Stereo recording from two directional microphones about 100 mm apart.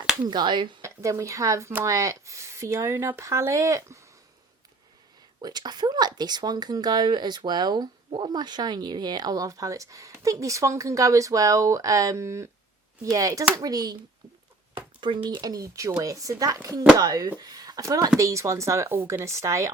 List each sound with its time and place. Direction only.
0.2 s speech: 50° right (ahead or behind)
0.8 s speech: 30° right (ahead or behind)
5.4 s speech: 45° right (ahead or behind)
15.0 s a child's voice: 55° right (ahead or behind)
15.4 s speech: 40° right (ahead or behind)